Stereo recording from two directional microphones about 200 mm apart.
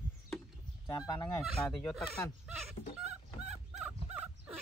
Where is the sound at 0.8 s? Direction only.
20° left (ahead or behind).